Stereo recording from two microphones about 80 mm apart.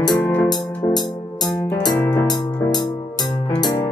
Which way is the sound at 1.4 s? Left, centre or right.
Left.